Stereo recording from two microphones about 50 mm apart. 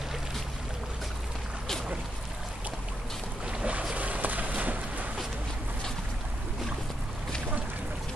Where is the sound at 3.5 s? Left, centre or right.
Right.